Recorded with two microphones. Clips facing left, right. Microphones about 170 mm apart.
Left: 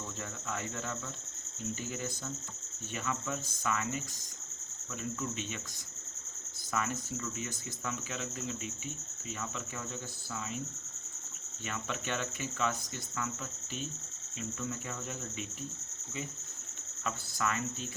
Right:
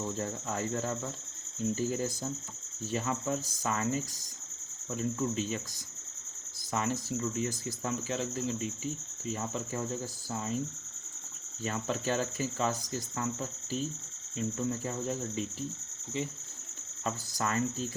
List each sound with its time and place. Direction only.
0.2 s cricket: 35° right (ahead or behind)
6.7 s speech: 30° right (ahead or behind)
7.2 s cricket: 30° right (ahead or behind)
11.6 s cricket: 35° right (ahead or behind)
17.0 s cricket: 35° right (ahead or behind)